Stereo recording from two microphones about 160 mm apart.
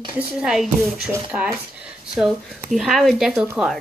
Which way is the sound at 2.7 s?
Centre (ahead or behind).